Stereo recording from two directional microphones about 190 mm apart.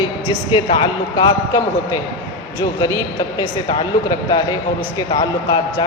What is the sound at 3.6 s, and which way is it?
Speech, 20° left (ahead or behind).